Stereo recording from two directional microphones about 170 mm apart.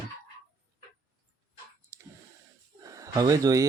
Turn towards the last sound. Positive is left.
turn(degrees=-20)  # may be behind; listen again after turning